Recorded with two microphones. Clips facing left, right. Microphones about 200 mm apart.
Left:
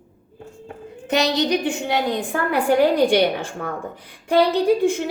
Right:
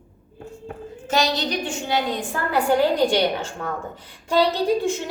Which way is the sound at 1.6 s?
60° left (ahead or behind).